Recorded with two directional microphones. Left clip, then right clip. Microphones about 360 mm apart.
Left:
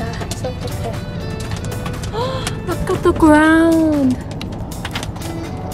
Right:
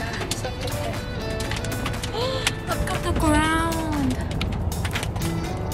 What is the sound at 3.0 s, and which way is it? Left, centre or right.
Speech, centre.